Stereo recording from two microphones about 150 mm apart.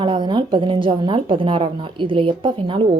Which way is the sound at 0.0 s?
35° right (ahead or behind).